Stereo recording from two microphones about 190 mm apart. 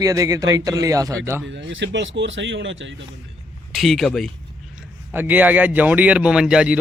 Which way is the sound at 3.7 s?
Centre (ahead or behind).